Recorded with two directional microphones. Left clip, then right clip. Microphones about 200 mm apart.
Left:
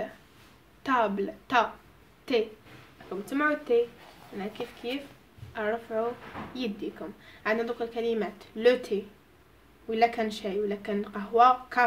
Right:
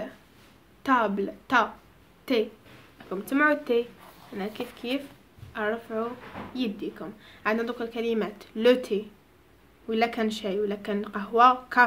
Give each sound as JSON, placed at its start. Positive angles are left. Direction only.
{"t": 0.8, "sound": "a woman's voice", "side_deg": -25}